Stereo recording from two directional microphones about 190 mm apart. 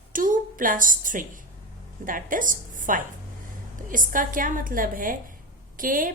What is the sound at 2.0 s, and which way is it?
A woman's voice, 45° right (ahead or behind).